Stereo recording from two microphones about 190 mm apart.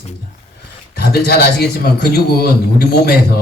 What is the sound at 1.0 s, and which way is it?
Speech, 55° left (ahead or behind).